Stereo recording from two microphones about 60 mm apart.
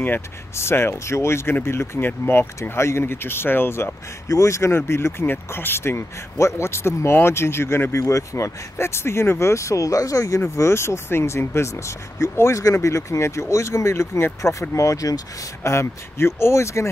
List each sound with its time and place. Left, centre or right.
0.6 s speech: left
4.3 s speech: left
10.4 s speech: left
15.6 s speech: left